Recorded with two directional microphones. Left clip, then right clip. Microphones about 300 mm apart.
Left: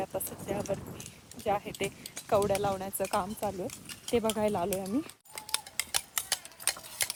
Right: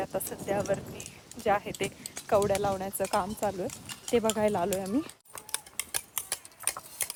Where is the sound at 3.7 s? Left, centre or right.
Right.